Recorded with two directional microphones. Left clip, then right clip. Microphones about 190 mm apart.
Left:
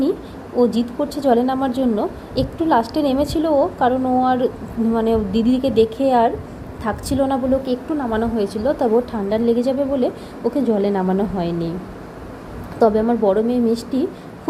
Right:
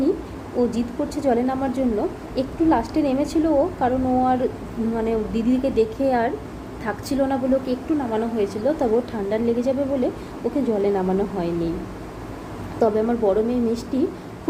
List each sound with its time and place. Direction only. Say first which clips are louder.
0.5 s a woman's voice: left 5 dB; 15° left (ahead or behind)
12.8 s a woman's voice: left 4 dB; 15° left (ahead or behind)